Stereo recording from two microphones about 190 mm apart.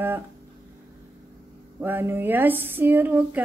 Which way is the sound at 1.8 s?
10° right (ahead or behind).